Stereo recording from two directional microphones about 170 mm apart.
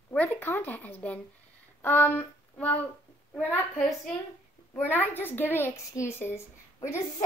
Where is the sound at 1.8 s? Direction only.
10° left (ahead or behind).